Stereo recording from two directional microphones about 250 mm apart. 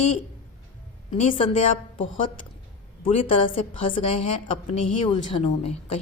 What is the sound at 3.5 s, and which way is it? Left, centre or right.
A woman's voice, left.